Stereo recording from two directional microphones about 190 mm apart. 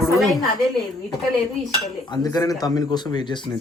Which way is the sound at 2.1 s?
20° left (ahead or behind).